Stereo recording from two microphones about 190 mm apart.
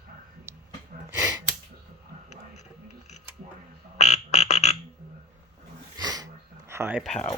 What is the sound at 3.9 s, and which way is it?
Frog, 35° left (ahead or behind).